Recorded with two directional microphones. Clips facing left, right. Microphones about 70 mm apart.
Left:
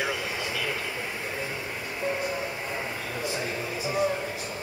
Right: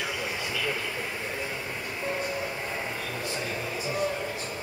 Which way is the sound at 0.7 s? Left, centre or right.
Centre.